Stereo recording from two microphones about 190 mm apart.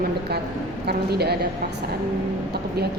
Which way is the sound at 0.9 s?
60° right (ahead or behind).